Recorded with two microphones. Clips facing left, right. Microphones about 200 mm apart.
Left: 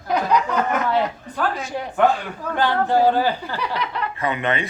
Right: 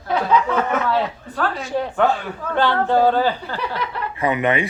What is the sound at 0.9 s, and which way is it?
Speech, 15° left (ahead or behind).